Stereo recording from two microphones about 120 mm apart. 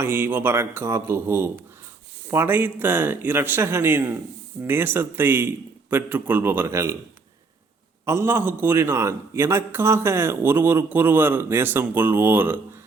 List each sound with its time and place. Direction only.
0.0 s a man's voice: 15° right (ahead or behind)
8.0 s a man's voice: 20° right (ahead or behind)